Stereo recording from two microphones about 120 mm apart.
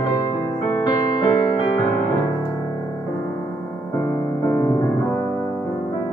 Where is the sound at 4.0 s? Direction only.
25° left (ahead or behind).